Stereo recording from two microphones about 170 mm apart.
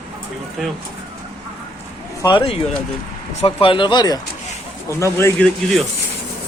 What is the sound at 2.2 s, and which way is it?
Speech, 30° left (ahead or behind).